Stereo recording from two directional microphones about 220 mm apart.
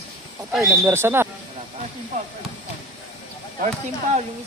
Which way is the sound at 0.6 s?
10° right (ahead or behind).